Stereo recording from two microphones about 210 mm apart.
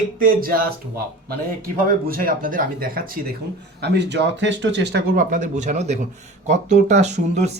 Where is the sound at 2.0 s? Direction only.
45° right (ahead or behind).